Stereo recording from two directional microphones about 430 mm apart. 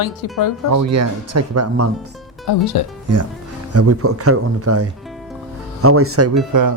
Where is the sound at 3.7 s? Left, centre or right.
Right.